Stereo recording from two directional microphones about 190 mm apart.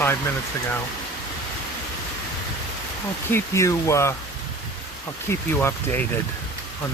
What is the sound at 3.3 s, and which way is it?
Speech, 15° left (ahead or behind).